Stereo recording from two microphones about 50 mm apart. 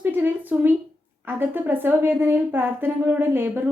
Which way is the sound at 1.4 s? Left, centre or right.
Right.